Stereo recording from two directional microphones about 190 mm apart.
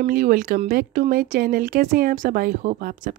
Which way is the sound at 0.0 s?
50° right (ahead or behind).